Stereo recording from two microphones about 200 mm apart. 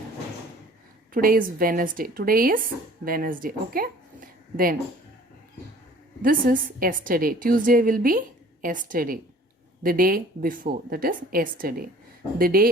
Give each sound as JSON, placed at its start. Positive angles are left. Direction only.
{"t": 1.1, "sound": "a woman's voice", "side_deg": -45}
{"t": 6.2, "sound": "a woman's voice", "side_deg": -45}